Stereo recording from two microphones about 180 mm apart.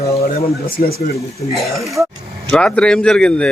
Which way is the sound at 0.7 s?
60° left (ahead or behind).